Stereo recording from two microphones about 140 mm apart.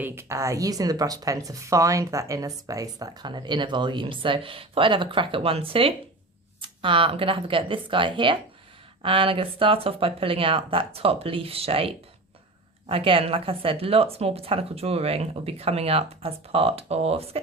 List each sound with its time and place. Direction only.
0.0 s speech: 20° right (ahead or behind); by 17.4 s 45° right (ahead or behind)